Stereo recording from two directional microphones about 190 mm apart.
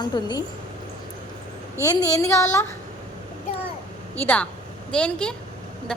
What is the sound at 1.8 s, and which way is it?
Speech, 20° left (ahead or behind).